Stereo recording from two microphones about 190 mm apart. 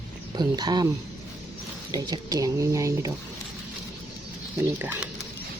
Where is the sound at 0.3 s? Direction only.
20° right (ahead or behind).